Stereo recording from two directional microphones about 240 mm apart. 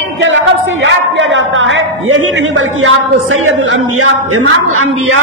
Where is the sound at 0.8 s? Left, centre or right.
Right.